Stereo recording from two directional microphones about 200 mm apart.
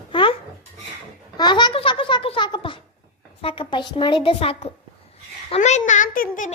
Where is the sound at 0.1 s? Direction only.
25° left (ahead or behind).